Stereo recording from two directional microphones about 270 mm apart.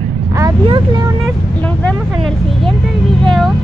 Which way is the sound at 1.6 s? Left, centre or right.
Centre.